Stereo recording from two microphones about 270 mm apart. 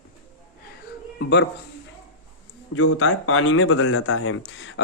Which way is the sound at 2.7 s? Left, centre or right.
Left.